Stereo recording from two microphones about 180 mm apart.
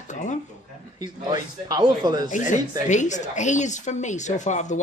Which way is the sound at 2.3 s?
45° left (ahead or behind).